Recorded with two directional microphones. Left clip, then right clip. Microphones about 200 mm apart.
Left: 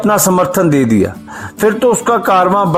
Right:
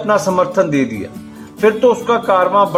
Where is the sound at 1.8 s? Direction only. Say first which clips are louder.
Left 4 dB; 50° left (ahead or behind).